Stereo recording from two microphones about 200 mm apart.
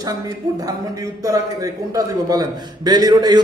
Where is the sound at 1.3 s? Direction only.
15° right (ahead or behind).